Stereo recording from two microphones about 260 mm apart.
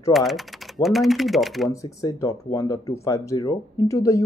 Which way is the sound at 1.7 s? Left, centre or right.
Centre.